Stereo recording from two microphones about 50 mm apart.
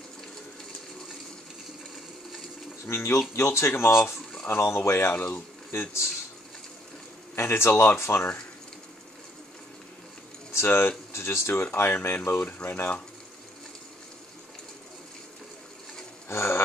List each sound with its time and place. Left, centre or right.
2.9 s speech: left
7.3 s speech: left
10.5 s speech: left
16.3 s a sound: left